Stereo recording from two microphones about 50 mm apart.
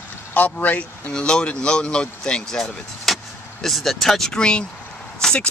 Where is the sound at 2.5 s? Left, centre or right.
Centre.